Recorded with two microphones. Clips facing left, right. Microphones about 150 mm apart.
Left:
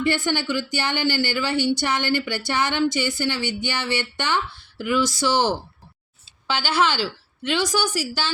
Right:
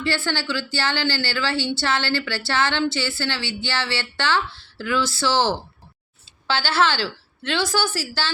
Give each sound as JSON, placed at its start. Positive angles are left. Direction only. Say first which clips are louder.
{"t": 0.0, "sound": "a woman's voice", "louder": "left 2 dB", "side_deg": 20}